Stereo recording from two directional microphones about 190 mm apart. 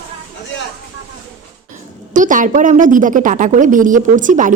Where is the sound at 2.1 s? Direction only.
40° right (ahead or behind).